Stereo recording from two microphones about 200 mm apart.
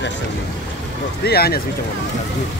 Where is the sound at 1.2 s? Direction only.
50° left (ahead or behind).